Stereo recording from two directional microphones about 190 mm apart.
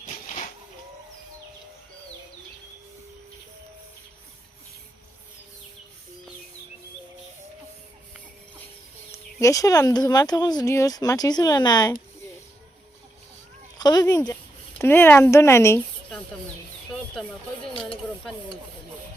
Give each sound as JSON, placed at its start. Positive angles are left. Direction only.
{"t": 0.0, "sound": "a sound", "side_deg": 40}
{"t": 9.1, "sound": "speech", "side_deg": 15}
{"t": 13.7, "sound": "speech", "side_deg": 20}